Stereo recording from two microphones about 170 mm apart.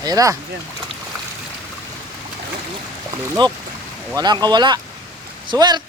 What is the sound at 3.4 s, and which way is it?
Speech, 25° right (ahead or behind).